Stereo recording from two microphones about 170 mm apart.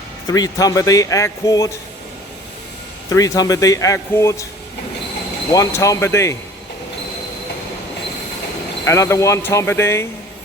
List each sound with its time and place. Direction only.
0.3 s speech: 20° left (ahead or behind)
3.1 s speech: 20° left (ahead or behind)
5.5 s speech: 20° left (ahead or behind)
8.8 s speech: 15° left (ahead or behind)